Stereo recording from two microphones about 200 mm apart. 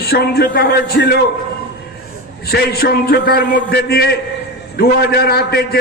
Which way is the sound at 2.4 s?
50° left (ahead or behind).